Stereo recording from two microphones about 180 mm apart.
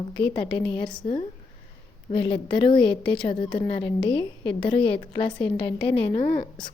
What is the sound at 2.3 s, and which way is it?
A woman's voice, 25° left (ahead or behind).